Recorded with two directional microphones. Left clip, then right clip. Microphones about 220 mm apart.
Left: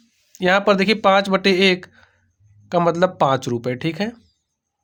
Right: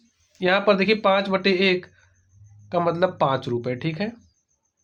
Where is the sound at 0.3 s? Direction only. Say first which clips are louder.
Left 3 dB; 40° left (ahead or behind).